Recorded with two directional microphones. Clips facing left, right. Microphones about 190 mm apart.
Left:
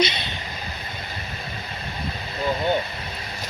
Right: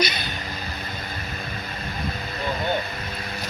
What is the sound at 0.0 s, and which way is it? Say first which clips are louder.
Vehicle: left 2 dB; 25° left (ahead or behind).